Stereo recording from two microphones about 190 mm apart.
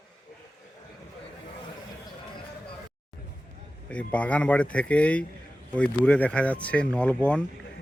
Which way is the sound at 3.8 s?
5° left (ahead or behind).